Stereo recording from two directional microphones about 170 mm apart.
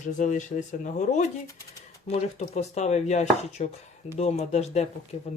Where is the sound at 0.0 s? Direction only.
45° left (ahead or behind).